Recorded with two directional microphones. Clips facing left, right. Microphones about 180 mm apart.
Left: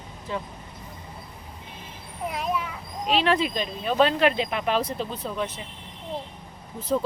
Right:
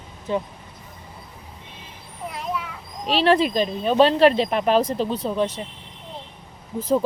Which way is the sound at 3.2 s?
40° right (ahead or behind).